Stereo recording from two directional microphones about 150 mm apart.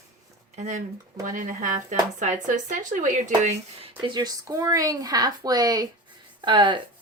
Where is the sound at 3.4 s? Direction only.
45° right (ahead or behind).